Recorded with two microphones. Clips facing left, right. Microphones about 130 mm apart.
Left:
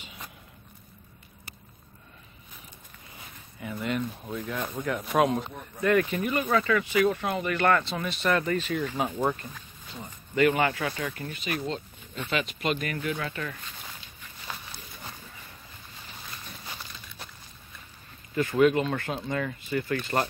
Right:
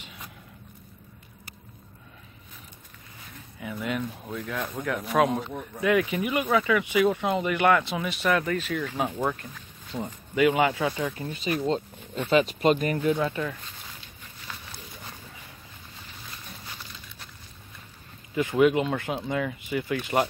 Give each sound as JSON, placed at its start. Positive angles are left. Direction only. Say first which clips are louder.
{"t": 0.0, "sound": "a sound", "louder": "even", "side_deg": 0}
{"t": 3.5, "sound": "speech", "louder": "even", "side_deg": 0}
{"t": 10.3, "sound": "speech", "louder": "right 1 dB", "side_deg": -10}
{"t": 11.2, "sound": "speech", "louder": "right 7 dB", "side_deg": -30}
{"t": 18.3, "sound": "speech", "louder": "right 1 dB", "side_deg": -15}